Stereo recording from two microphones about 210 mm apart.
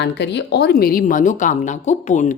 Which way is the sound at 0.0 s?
55° left (ahead or behind).